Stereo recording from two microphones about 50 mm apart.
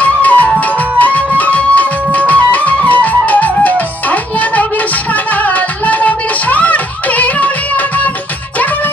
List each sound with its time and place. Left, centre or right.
0.0 s music: left